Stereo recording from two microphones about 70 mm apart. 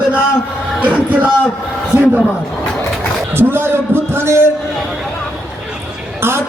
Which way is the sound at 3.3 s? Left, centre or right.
Right.